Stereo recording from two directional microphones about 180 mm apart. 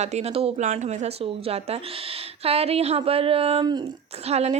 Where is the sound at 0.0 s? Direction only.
40° right (ahead or behind).